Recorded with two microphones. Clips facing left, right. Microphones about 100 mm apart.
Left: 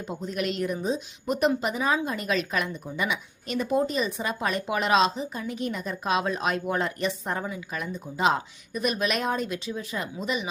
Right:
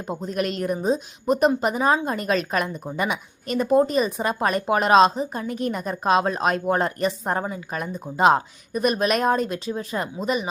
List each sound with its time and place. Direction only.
0.1 s a woman's voice: 40° right (ahead or behind)